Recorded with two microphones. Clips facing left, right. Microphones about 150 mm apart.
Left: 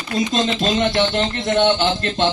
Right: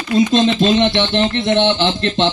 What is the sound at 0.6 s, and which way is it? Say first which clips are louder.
Speech: right 5 dB; 25° right (ahead or behind).